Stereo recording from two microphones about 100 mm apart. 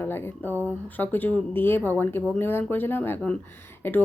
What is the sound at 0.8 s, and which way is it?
Speech, 20° left (ahead or behind).